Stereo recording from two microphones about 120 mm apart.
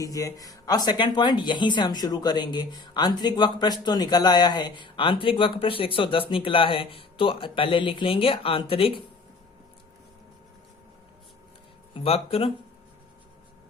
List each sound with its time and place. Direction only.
0.0 s speech: 30° left (ahead or behind); by 8.9 s 50° left (ahead or behind)
12.0 s speech: 55° left (ahead or behind)